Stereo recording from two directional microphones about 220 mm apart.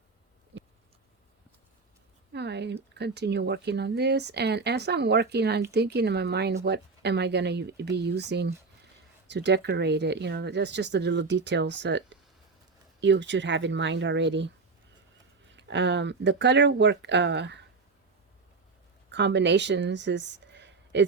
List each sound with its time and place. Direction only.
0.5 s a sound: 55° right (ahead or behind)
2.3 s speech: 50° right (ahead or behind)
19.1 s speech: 55° right (ahead or behind)